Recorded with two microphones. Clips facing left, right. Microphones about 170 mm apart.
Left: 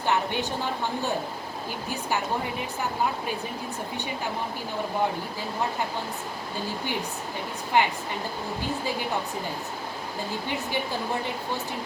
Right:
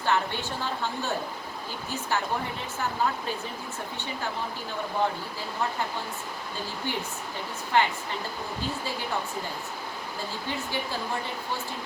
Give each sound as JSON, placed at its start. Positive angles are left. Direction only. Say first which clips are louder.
{"t": 0.0, "sound": "a woman's voice", "louder": "left 1 dB", "side_deg": 15}
{"t": 7.7, "sound": "speech", "louder": "left 1 dB", "side_deg": 15}